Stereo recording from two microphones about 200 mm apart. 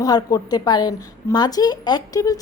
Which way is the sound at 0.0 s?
20° left (ahead or behind).